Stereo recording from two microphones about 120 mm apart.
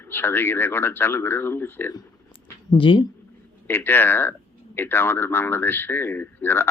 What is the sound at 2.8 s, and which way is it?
Speech, 45° left (ahead or behind).